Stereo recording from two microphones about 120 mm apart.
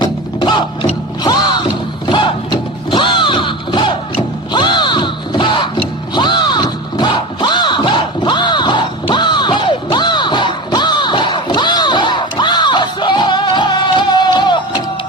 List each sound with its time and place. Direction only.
0.0 s music: 40° left (ahead or behind)